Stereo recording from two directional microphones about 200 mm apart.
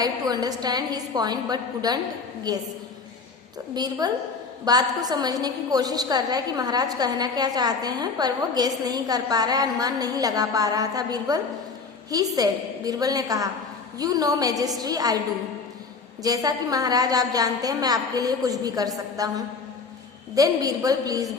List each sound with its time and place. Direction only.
0.0 s a woman's voice: 20° right (ahead or behind)
3.8 s a woman's voice: 20° right (ahead or behind)
16.2 s a woman's voice: 20° right (ahead or behind)